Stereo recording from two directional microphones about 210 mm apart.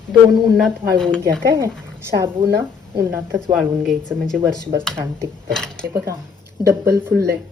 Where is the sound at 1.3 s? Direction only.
15° right (ahead or behind).